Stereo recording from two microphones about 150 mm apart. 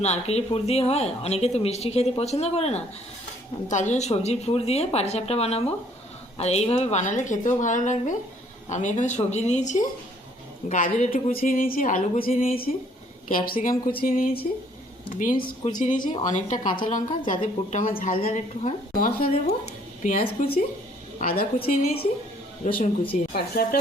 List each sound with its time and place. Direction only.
0.0 s a woman's voice: 45° left (ahead or behind)
11.3 s a woman's voice: 70° left (ahead or behind)
15.1 s a woman's voice: 60° left (ahead or behind)
15.4 s a woman's voice: 35° left (ahead or behind)
16.2 s a woman's voice: 55° left (ahead or behind)
19.3 s a woman's voice: 45° left (ahead or behind)
21.2 s a woman's voice: 80° left
22.6 s a woman's voice: 55° left (ahead or behind)
23.6 s speech: 90° left